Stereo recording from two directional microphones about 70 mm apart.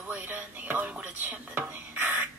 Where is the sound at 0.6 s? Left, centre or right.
Right.